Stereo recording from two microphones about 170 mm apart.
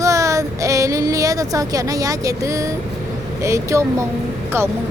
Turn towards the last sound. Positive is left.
turn(degrees=-15)  # may be behind; listen again after turning